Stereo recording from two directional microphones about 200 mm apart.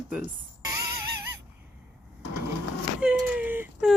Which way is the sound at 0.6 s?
15° right (ahead or behind).